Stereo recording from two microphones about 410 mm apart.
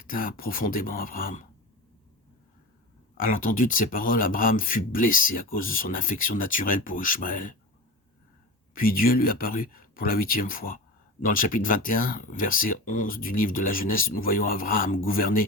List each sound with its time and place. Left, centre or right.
0.0 s speech: left
3.2 s speech: centre
8.7 s speech: left